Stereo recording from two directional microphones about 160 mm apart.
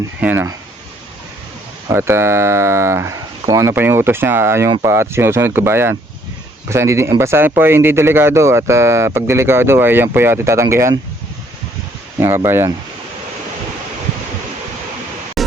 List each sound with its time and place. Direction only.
0.2 s speech: 15° right (ahead or behind)
1.9 s speech: 15° right (ahead or behind)
12.2 s speech: 15° right (ahead or behind)
15.4 s a sound: centre (ahead or behind)